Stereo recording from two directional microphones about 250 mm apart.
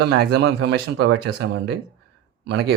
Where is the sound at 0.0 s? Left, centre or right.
Right.